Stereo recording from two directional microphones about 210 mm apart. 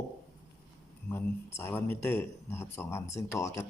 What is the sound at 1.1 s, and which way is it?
Speech, 10° left (ahead or behind).